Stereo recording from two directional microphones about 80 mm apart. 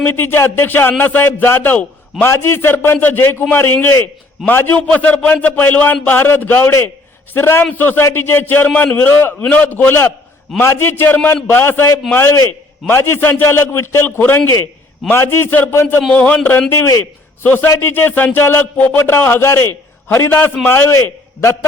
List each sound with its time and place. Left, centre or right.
0.0 s a man's voice: left